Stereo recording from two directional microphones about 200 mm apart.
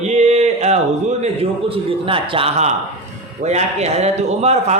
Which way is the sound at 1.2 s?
30° right (ahead or behind).